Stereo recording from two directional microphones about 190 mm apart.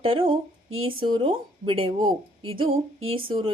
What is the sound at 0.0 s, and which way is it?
Speech, 30° right (ahead or behind).